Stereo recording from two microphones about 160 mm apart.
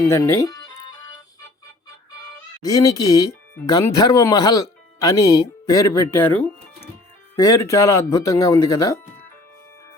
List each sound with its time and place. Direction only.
0.0 s speech: 20° left (ahead or behind)
2.6 s speech: 20° left (ahead or behind)